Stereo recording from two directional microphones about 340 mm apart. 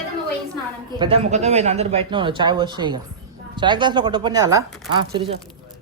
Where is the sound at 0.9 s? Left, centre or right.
Centre.